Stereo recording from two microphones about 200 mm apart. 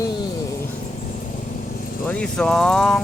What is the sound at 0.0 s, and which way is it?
Vehicle, 25° left (ahead or behind).